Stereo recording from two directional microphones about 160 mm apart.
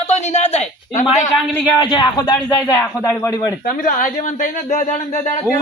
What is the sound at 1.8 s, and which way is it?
Speech, 25° left (ahead or behind).